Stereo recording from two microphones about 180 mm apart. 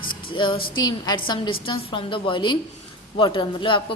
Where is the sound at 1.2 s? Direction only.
25° left (ahead or behind).